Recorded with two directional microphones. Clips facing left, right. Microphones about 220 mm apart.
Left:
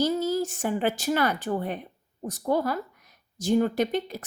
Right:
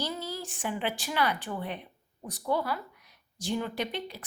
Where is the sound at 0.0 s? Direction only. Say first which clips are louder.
Left 11 dB; 45° left (ahead or behind).